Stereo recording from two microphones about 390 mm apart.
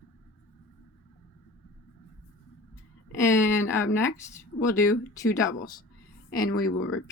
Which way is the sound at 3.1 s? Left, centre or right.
Centre.